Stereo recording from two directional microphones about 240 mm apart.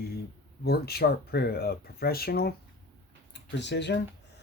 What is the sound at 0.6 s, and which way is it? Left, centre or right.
Speech, left.